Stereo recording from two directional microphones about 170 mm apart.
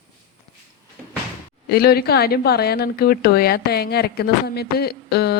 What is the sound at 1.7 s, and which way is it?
A woman's voice, 65° left (ahead or behind).